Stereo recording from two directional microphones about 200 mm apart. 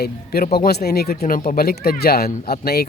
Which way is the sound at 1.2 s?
40° left (ahead or behind).